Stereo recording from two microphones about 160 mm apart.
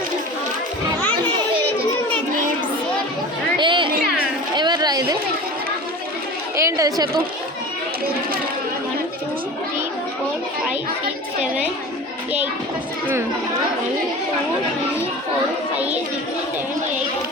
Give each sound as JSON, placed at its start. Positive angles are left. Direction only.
{"t": 3.6, "sound": "music", "side_deg": -30}
{"t": 4.5, "sound": "a sound", "side_deg": -25}
{"t": 6.6, "sound": "chatter", "side_deg": -20}